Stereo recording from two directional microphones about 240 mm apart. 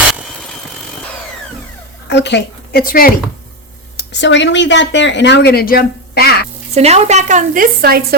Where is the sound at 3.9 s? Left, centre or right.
Left.